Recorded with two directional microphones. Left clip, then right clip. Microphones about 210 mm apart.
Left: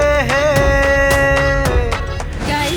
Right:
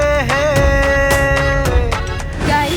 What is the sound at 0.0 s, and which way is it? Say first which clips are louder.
Music: left 1 dB; centre (ahead or behind).